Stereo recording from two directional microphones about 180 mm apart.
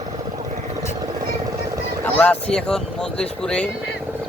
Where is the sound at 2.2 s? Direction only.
5° left (ahead or behind).